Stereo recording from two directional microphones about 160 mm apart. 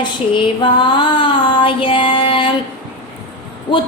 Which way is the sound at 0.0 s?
30° left (ahead or behind).